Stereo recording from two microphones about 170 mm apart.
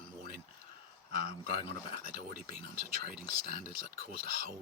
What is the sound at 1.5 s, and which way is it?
Speech, 55° right (ahead or behind).